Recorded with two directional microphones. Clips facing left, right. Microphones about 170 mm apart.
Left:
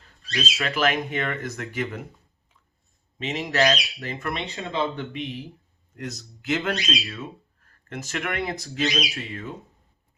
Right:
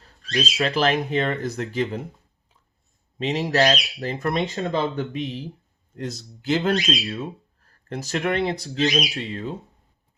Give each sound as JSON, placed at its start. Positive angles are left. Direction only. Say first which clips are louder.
{"t": 0.0, "sound": "speech", "louder": "right 4 dB", "side_deg": -35}
{"t": 3.2, "sound": "speech", "louder": "right 3 dB", "side_deg": -35}
{"t": 6.0, "sound": "speech", "louder": "right 3 dB", "side_deg": -30}